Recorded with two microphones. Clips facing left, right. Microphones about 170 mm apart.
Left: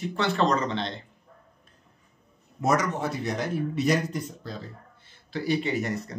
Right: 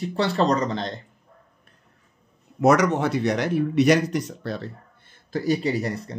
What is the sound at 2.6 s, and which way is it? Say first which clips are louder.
Speech: right 7 dB; 75° right (ahead or behind).